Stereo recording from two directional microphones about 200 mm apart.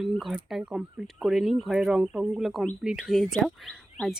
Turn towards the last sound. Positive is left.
turn(degrees=0)  # may be behind; listen again after turning